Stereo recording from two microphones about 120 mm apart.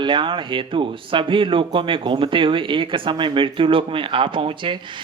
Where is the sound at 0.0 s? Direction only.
45° right (ahead or behind).